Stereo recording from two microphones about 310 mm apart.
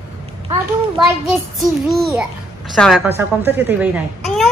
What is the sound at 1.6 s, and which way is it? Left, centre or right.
A child's voice, centre.